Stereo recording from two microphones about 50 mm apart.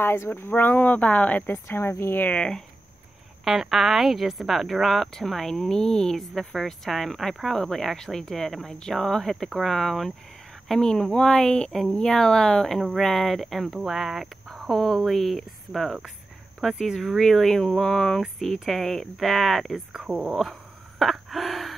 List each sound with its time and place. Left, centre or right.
0.3 s speech: left
1.4 s speech: left
2.3 s speech: centre
3.4 s a woman's voice: centre
17.2 s a woman's voice: centre
19.9 s speech: centre
21.0 s gasp: centre